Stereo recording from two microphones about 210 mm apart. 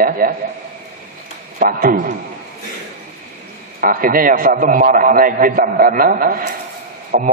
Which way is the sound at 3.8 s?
40° right (ahead or behind).